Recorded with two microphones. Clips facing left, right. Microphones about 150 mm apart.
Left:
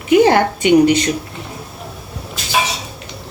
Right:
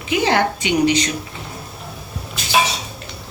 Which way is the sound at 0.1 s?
50° left (ahead or behind).